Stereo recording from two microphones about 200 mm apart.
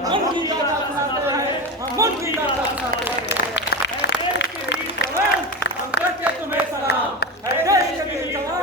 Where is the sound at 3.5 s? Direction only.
60° left (ahead or behind).